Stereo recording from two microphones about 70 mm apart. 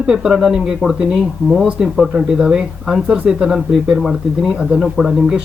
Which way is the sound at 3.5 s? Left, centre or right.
Centre.